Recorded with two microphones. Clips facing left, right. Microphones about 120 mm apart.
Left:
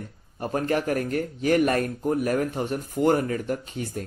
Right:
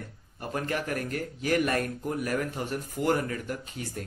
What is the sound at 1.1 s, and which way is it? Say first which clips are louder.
Speech: left 4 dB; 30° left (ahead or behind).